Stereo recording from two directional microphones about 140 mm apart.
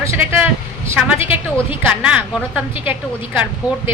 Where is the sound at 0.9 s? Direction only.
10° right (ahead or behind).